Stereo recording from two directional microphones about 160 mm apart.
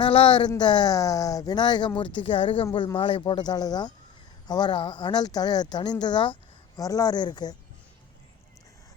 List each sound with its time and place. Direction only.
0.0 s speech: 30° left (ahead or behind)